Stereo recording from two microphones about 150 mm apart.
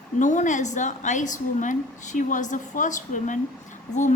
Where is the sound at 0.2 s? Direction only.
55° left (ahead or behind).